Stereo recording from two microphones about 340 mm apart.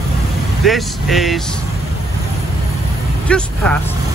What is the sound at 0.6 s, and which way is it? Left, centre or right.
Speech, centre.